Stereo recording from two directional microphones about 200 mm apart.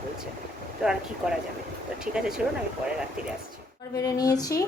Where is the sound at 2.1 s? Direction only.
5° right (ahead or behind).